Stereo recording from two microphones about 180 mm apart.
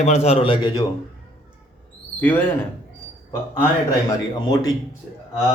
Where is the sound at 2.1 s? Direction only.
10° left (ahead or behind).